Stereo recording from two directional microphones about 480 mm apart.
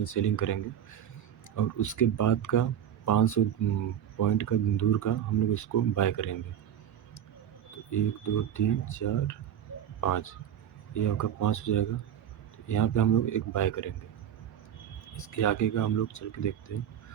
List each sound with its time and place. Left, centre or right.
0.0 s speech: left
7.9 s speech: left
15.0 s speech: left